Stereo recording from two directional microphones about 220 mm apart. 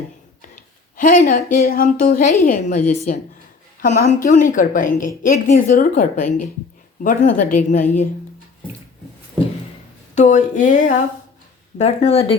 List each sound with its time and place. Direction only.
0.9 s a woman's voice: 35° left (ahead or behind)
10.2 s a woman's voice: 35° left (ahead or behind)